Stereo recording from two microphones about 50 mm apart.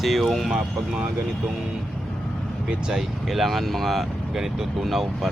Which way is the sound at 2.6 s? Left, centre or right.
Centre.